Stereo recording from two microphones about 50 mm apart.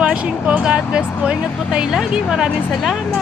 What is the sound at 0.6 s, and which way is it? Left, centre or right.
Speech, centre.